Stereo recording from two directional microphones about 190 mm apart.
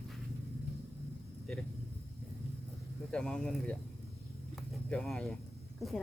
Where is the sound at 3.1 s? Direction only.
5° left (ahead or behind).